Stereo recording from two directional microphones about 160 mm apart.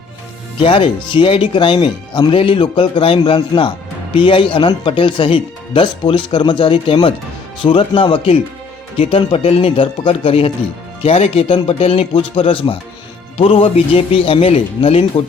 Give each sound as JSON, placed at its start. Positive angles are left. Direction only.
{"t": 0.6, "sound": "speech", "side_deg": 30}